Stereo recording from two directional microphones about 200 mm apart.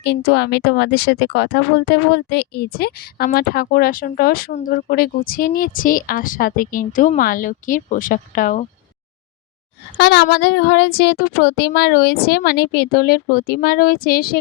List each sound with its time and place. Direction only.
0.0 s a woman's voice: 55° left (ahead or behind)
10.0 s speech: 55° left (ahead or behind)